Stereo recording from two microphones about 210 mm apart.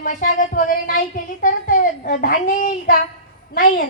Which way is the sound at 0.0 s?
40° left (ahead or behind).